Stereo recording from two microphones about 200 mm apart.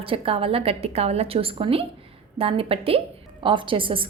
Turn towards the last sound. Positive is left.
turn(degrees=-25)  # may be behind; listen again after turning